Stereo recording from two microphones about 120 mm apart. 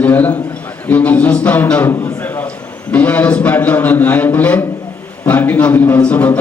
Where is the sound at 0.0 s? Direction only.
15° left (ahead or behind).